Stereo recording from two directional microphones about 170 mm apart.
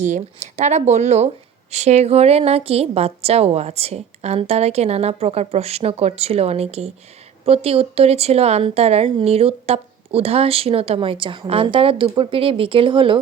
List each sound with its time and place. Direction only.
0.0 s speech: 40° right (ahead or behind)